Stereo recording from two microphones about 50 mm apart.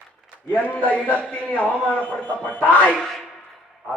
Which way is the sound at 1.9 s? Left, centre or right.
Left.